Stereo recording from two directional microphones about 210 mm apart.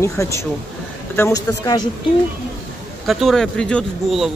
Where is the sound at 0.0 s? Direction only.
15° left (ahead or behind).